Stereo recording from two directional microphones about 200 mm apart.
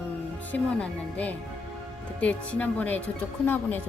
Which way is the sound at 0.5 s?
5° left (ahead or behind).